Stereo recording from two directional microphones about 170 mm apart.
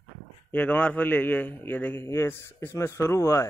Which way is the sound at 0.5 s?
5° left (ahead or behind).